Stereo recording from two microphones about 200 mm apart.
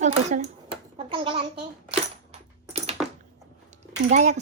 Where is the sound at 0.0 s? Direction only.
35° right (ahead or behind).